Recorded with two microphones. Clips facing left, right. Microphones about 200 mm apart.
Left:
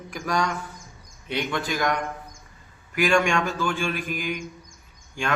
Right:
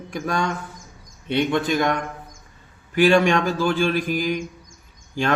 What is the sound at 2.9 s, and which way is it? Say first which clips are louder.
Mantra: right 5 dB; 30° right (ahead or behind).